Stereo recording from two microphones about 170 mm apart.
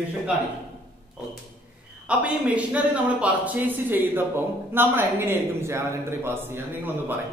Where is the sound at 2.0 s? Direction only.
5° right (ahead or behind).